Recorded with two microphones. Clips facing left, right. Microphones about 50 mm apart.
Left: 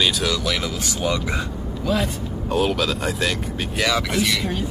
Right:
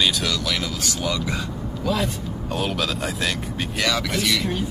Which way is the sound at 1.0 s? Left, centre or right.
Left.